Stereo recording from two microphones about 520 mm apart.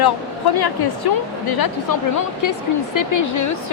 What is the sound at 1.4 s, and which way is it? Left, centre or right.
A woman's voice, left.